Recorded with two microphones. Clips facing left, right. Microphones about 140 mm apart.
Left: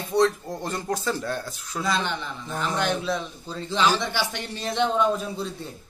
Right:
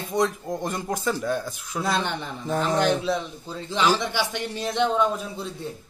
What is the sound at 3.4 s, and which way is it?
A man's voice, 10° right (ahead or behind).